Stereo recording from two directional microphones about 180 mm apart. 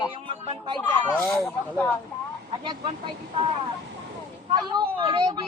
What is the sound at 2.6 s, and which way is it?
Speech, 25° right (ahead or behind).